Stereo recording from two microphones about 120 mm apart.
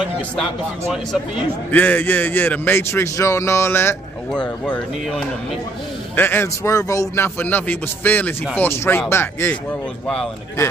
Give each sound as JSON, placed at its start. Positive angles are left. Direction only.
{"t": 1.7, "sound": "a man's voice", "side_deg": 15}
{"t": 4.3, "sound": "speech", "side_deg": 5}
{"t": 6.1, "sound": "a man's voice", "side_deg": 15}
{"t": 7.3, "sound": "a man's voice", "side_deg": 15}